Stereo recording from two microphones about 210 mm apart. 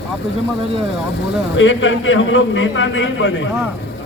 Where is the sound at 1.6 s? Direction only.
65° left (ahead or behind).